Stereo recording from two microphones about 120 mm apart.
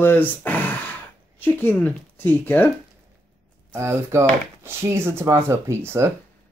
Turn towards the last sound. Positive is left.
turn(degrees=-20)  # may be behind; listen again after turning